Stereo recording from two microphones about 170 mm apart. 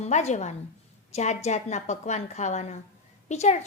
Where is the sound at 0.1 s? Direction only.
40° left (ahead or behind).